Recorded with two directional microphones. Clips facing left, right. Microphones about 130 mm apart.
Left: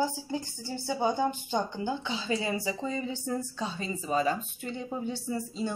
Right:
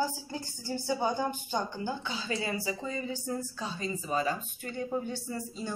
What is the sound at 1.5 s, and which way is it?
A woman's voice, 20° left (ahead or behind).